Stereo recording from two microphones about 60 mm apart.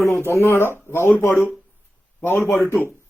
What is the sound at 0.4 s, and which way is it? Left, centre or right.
Speech, left.